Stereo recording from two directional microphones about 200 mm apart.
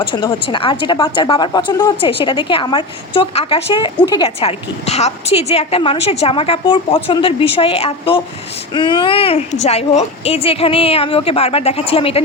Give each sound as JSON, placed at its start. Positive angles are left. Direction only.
{"t": 0.0, "sound": "a woman's voice", "side_deg": 25}